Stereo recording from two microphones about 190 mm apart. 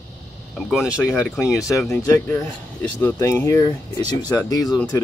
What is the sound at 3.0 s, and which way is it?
Speech, 15° left (ahead or behind).